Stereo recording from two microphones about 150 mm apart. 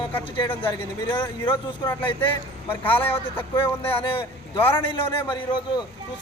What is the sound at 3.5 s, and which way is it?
A man's voice, 35° left (ahead or behind).